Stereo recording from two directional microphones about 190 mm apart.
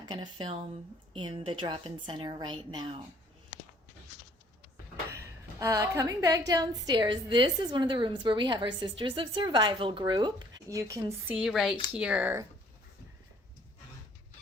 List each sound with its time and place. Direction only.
0.0 s a woman's voice: 25° right (ahead or behind)
5.5 s a woman's voice: 15° right (ahead or behind)
11.3 s speech: centre (ahead or behind)